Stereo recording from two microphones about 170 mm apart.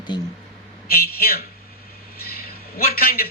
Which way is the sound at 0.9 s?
65° left (ahead or behind).